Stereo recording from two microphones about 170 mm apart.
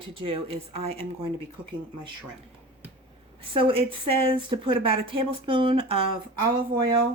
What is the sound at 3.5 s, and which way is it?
Speech, 30° right (ahead or behind).